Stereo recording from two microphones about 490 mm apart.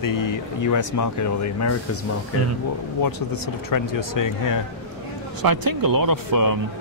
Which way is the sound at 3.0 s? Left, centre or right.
Left.